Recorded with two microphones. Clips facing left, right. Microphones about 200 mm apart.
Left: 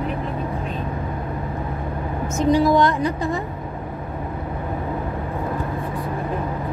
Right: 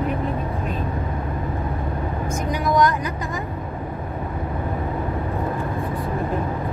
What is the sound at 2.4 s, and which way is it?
Speech, 30° left (ahead or behind).